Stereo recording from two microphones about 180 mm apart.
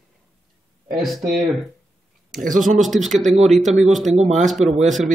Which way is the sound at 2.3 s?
50° right (ahead or behind).